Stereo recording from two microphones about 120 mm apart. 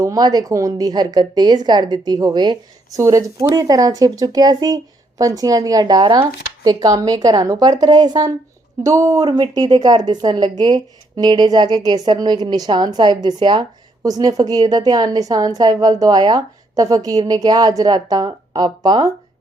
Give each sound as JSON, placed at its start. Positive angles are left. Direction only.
{"t": 0.0, "sound": "a woman's voice", "side_deg": -30}